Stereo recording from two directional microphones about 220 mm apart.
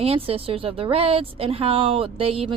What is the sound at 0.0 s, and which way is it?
A woman's voice, 25° right (ahead or behind).